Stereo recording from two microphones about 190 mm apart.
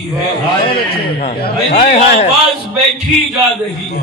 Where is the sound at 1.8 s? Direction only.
35° left (ahead or behind).